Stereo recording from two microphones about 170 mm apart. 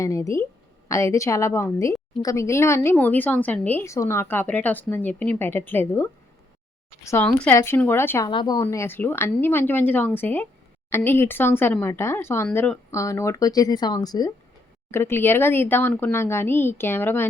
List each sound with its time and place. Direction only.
0.0 s a woman's voice: 20° left (ahead or behind)
7.3 s a woman's voice: 5° left (ahead or behind)
8.3 s a woman's voice: 25° left (ahead or behind); by 12.8 s 5° left (ahead or behind)
12.9 s a woman's voice: 15° left (ahead or behind)